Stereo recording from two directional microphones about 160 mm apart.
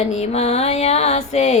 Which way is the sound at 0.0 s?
40° left (ahead or behind).